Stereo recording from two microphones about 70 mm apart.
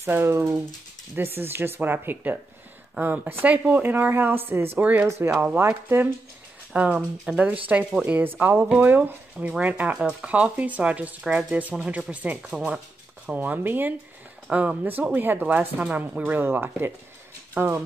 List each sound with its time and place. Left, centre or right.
0.0 s speech: right
6.7 s speech: centre
8.2 s speech: right; by 12.8 s centre
13.3 s speech: right